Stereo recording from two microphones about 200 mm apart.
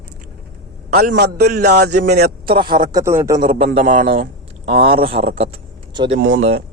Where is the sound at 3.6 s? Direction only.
30° right (ahead or behind).